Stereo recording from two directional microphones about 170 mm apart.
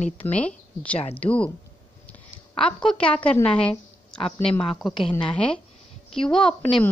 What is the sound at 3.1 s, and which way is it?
A woman's voice, 10° left (ahead or behind).